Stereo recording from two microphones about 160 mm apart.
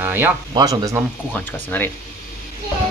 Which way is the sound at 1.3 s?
10° left (ahead or behind).